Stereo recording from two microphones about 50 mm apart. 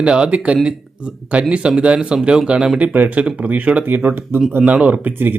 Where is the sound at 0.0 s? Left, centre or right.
Right.